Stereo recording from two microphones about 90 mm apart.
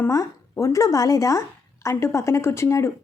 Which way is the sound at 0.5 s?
35° left (ahead or behind).